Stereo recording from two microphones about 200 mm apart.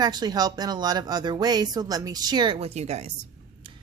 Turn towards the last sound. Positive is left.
turn(degrees=-35)  # may be behind; listen again after turning